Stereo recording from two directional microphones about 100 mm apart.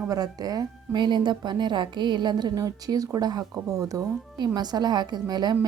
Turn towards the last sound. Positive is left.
turn(degrees=-45)  # may be behind; listen again after turning